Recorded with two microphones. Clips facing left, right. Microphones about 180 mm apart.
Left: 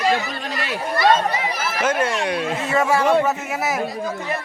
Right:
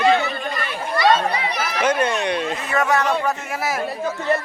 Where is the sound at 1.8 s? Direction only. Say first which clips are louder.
Right 1 dB; 5° left (ahead or behind).